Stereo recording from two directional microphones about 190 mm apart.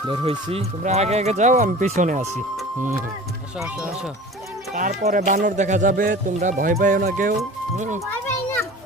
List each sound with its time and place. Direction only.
0.1 s speech: 30° right (ahead or behind)
3.6 s speech: 5° right (ahead or behind)
4.7 s speech: 40° right (ahead or behind)